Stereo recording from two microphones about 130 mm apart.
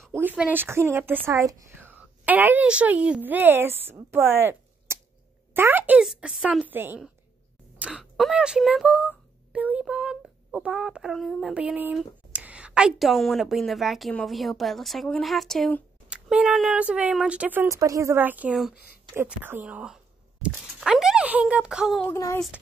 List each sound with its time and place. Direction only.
0.1 s a woman's voice: 15° right (ahead or behind)
6.7 s speech: 15° right (ahead or behind)
7.8 s a woman's voice: 5° right (ahead or behind)
22.0 s speech: 20° left (ahead or behind)